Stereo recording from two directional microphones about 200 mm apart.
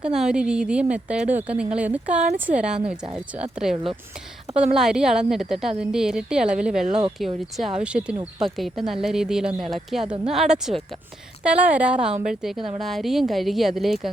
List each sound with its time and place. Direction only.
0.0 s a woman's voice: 5° right (ahead or behind)
10.0 s speech: 30° right (ahead or behind)
10.3 s a woman's voice: centre (ahead or behind)
12.1 s a woman's voice: 40° right (ahead or behind)
12.4 s a woman's voice: centre (ahead or behind)